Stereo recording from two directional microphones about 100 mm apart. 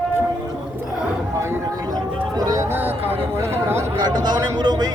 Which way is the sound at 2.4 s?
35° right (ahead or behind).